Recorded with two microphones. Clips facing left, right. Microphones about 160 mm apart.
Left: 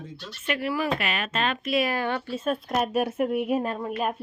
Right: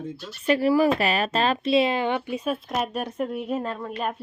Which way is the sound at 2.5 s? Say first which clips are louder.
Left 5 dB; centre (ahead or behind).